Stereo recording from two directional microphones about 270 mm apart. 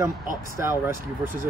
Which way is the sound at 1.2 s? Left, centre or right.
Right.